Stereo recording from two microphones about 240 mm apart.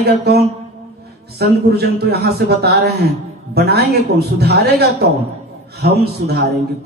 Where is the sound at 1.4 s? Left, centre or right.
Right.